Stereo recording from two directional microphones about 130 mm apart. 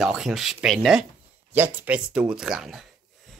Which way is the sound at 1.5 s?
15° right (ahead or behind).